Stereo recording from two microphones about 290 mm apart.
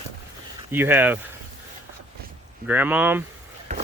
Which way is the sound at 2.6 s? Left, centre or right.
Centre.